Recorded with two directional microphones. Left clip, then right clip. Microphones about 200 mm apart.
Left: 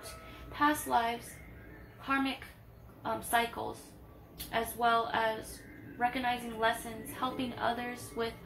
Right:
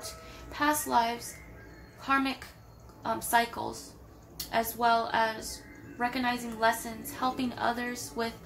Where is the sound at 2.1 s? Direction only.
25° right (ahead or behind).